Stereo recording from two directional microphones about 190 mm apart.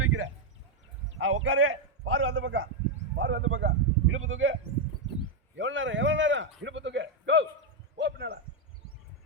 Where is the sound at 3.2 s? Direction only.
90° right.